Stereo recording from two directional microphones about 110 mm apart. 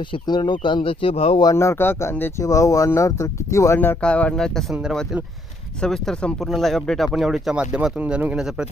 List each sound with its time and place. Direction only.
0.1 s speech: 45° left (ahead or behind); by 1.4 s 60° left (ahead or behind)
1.4 s speech: 25° left (ahead or behind)
4.0 s speech: 10° left (ahead or behind)
5.8 s speech: 5° left (ahead or behind); by 8.6 s 10° right (ahead or behind)